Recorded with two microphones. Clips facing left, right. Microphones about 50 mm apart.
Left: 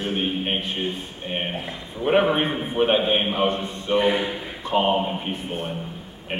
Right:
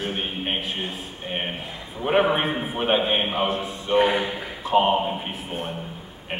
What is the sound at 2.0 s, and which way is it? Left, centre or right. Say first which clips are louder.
A man's voice: left 1 dB; centre.